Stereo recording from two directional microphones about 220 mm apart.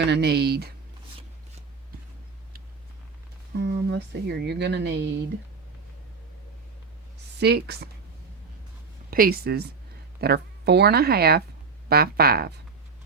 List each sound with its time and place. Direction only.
0.0 s speech: 50° right (ahead or behind)
3.6 s speech: 50° right (ahead or behind)
7.3 s speech: 50° right (ahead or behind)
9.0 s speech: 40° right (ahead or behind)